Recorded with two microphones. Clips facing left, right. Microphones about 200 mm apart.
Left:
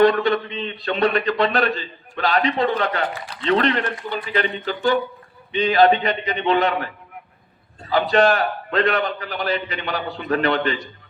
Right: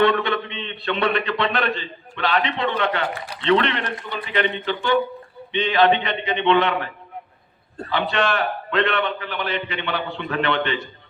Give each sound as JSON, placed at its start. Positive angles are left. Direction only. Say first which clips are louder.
{"t": 0.0, "sound": "speech", "louder": "left 3 dB", "side_deg": 40}
{"t": 7.9, "sound": "speech", "louder": "left 5 dB", "side_deg": 40}